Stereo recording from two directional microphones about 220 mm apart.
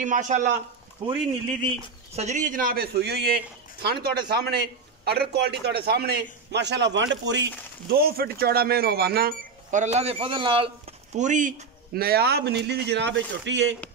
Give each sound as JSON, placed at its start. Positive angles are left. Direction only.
{"t": 0.0, "sound": "a man's voice", "side_deg": -35}
{"t": 2.1, "sound": "a man's voice", "side_deg": -35}
{"t": 7.9, "sound": "speech", "side_deg": -45}